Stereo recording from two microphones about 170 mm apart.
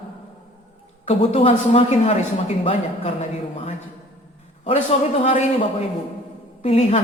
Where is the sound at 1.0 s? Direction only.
35° left (ahead or behind).